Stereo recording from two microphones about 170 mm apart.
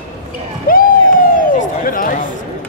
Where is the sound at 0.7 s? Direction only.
55° left (ahead or behind).